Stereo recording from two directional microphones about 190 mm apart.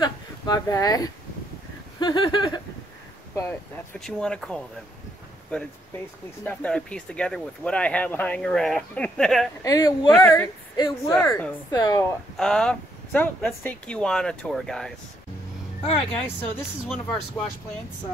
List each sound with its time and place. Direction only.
0.0 s speech: 20° left (ahead or behind)
2.0 s a sound: 25° left (ahead or behind)
3.3 s speech: 10° left (ahead or behind)
6.4 s speech: 5° left (ahead or behind)
9.6 s a woman's voice: 15° left (ahead or behind)
12.4 s speech: 5° left (ahead or behind)
16.3 s speech: 5° left (ahead or behind)